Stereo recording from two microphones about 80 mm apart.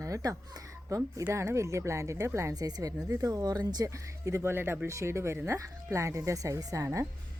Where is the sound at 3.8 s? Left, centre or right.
Right.